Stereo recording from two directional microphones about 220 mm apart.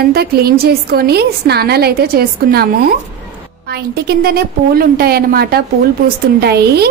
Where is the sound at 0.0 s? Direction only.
45° right (ahead or behind).